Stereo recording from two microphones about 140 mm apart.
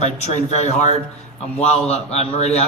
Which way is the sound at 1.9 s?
50° left (ahead or behind).